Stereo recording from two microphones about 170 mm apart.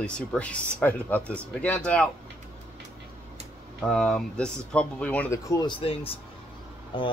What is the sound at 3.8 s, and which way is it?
Speech, 5° left (ahead or behind).